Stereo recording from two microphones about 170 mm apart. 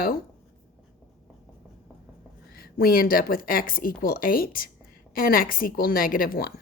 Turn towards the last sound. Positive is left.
turn(degrees=60)  # may be behind; listen again after turning